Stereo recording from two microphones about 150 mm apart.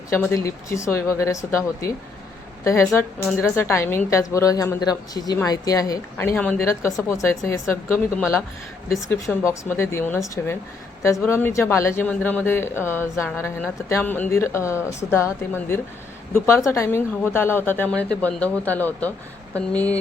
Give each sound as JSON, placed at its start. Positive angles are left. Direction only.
{"t": 0.1, "sound": "a woman's voice", "side_deg": 15}
{"t": 6.6, "sound": "a woman's voice", "side_deg": 20}